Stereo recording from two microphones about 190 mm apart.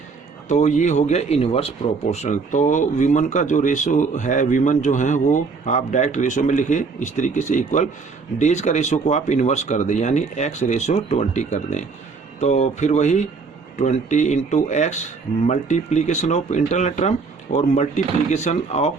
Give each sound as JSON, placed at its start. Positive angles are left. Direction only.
{"t": 0.4, "sound": "speech", "side_deg": 40}